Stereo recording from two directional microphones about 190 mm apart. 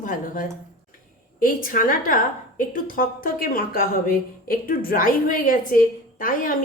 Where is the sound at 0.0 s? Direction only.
45° left (ahead or behind).